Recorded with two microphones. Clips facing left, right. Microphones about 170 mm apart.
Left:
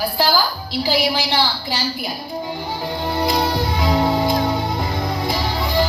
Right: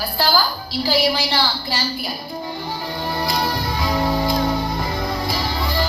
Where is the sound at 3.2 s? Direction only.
20° left (ahead or behind).